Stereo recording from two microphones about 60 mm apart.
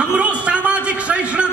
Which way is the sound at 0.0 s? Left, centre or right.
Centre.